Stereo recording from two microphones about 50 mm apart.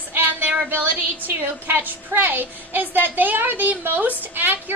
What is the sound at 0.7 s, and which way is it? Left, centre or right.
A woman's voice, right.